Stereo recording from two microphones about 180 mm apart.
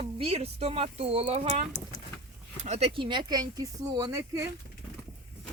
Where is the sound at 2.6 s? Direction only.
35° right (ahead or behind); by 4.4 s 15° right (ahead or behind).